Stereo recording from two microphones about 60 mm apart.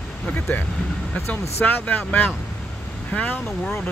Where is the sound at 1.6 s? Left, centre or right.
Left.